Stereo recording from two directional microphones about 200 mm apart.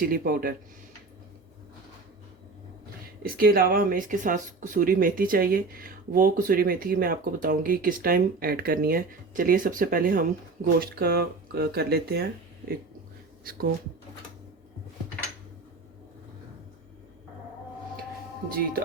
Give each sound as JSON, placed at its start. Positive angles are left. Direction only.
{"t": 0.1, "sound": "speech", "side_deg": -45}
{"t": 3.2, "sound": "speech", "side_deg": -45}
{"t": 13.4, "sound": "speech", "side_deg": -45}